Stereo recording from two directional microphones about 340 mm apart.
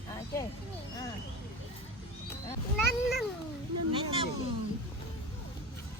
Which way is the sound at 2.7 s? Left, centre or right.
Centre.